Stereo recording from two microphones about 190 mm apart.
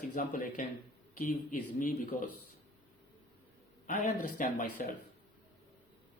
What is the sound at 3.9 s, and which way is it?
Speech, 45° left (ahead or behind).